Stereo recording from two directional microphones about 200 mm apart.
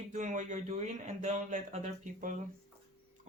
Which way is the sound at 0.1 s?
35° right (ahead or behind).